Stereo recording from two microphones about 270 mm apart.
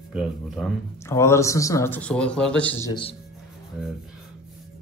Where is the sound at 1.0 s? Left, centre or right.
Centre.